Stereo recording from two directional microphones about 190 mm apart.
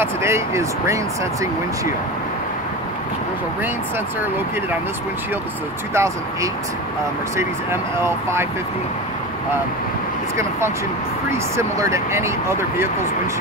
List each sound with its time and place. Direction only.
0.0 s speech: 15° right (ahead or behind)
5.9 s speech: 15° right (ahead or behind)
11.5 s speech: 15° right (ahead or behind)